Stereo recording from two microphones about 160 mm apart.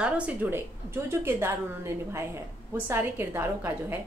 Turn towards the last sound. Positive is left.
turn(degrees=-15)  # may be behind; listen again after turning